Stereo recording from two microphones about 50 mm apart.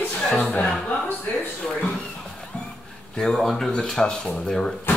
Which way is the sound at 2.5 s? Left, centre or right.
Centre.